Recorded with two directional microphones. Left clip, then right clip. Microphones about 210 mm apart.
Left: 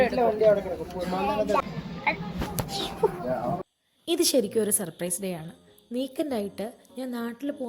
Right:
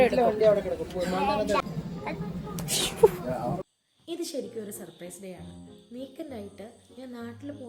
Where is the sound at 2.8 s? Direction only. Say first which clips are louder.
Right 6 dB; 30° right (ahead or behind).